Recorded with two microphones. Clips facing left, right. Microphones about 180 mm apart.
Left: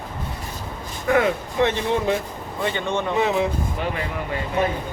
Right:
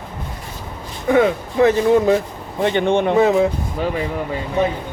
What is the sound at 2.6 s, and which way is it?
Speech, 60° right (ahead or behind).